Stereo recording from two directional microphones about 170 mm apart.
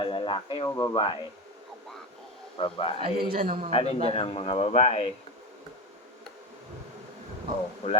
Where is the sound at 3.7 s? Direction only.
35° left (ahead or behind).